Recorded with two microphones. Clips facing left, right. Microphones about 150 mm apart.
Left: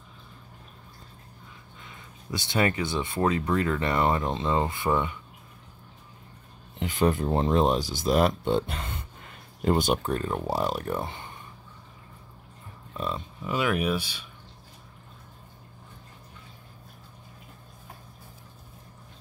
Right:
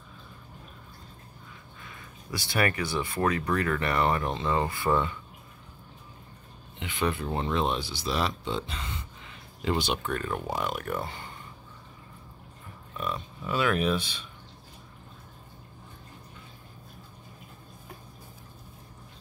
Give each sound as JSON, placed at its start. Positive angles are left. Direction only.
{"t": 1.8, "sound": "speech", "side_deg": 20}
{"t": 6.8, "sound": "speech", "side_deg": 40}
{"t": 10.1, "sound": "speech", "side_deg": 30}
{"t": 12.9, "sound": "a sound", "side_deg": 30}
{"t": 13.4, "sound": "speech", "side_deg": 15}